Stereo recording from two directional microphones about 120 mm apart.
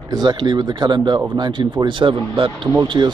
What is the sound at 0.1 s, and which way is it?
A man's voice, 35° right (ahead or behind).